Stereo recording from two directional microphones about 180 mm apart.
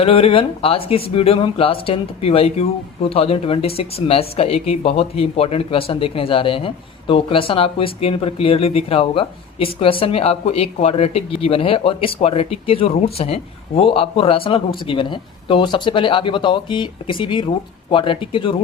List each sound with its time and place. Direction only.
0.0 s speech: 30° left (ahead or behind)